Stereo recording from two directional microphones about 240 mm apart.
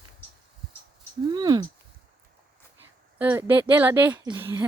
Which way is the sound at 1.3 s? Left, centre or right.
Centre.